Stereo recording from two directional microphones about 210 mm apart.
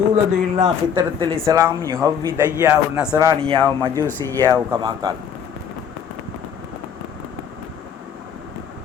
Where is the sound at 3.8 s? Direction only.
15° right (ahead or behind).